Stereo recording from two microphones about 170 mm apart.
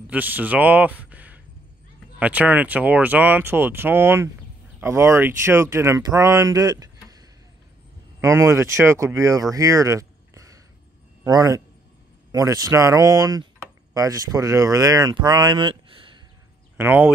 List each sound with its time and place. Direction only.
0.0 s a man's voice: 10° right (ahead or behind); by 16.2 s 30° right (ahead or behind)
16.7 s speech: 15° right (ahead or behind)